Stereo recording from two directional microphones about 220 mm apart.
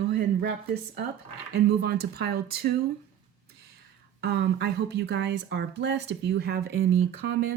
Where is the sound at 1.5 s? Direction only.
45° right (ahead or behind).